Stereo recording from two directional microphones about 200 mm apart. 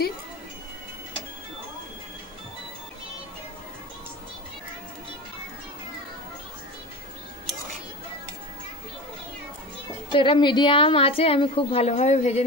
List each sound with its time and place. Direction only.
10.1 s a woman's voice: 25° left (ahead or behind)